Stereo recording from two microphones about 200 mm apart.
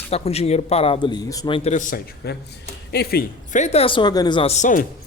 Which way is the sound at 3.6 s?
30° left (ahead or behind).